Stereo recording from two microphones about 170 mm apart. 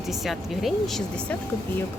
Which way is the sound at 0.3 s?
Centre (ahead or behind).